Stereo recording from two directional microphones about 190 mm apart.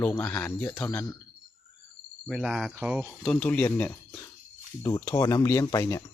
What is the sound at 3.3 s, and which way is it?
Speech, 5° left (ahead or behind).